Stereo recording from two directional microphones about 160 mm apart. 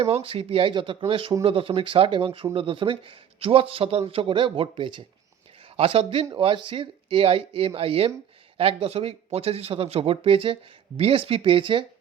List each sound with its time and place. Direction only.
0.0 s speech: 35° right (ahead or behind)